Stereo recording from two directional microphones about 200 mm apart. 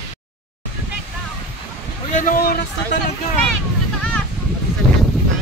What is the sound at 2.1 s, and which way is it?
Speech, 45° left (ahead or behind).